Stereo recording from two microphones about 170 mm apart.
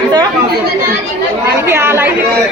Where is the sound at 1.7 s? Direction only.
15° right (ahead or behind).